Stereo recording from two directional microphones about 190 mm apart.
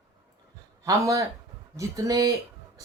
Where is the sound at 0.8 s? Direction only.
15° right (ahead or behind).